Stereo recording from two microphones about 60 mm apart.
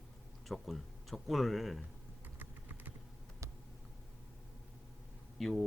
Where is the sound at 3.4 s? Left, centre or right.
Right.